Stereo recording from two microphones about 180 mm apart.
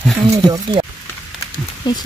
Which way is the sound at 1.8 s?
25° left (ahead or behind).